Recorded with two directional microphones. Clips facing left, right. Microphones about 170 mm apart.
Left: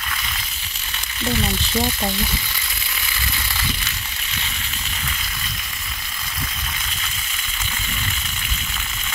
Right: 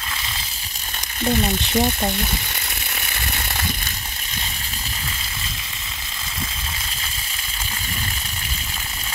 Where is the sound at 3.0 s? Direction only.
55° right (ahead or behind).